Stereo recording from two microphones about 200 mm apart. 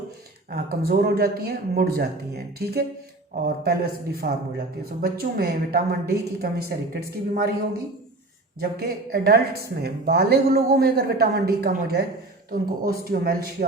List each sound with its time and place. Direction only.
0.5 s a woman's voice: 50° right (ahead or behind)
8.8 s a woman's voice: 50° right (ahead or behind)